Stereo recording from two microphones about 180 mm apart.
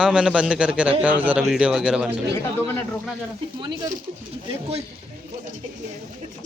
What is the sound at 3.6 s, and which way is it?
Speech, 25° right (ahead or behind).